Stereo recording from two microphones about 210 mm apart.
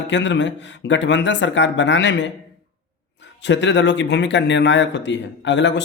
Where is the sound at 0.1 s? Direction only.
60° left (ahead or behind).